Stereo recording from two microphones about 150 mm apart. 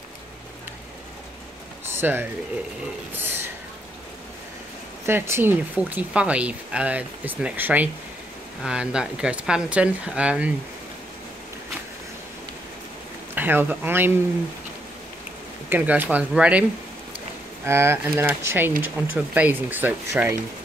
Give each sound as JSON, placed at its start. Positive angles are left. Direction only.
{"t": 1.9, "sound": "a sound", "side_deg": -15}
{"t": 5.0, "sound": "speech", "side_deg": -15}
{"t": 13.3, "sound": "speech", "side_deg": -15}
{"t": 15.7, "sound": "speech", "side_deg": -10}
{"t": 17.6, "sound": "speech", "side_deg": -15}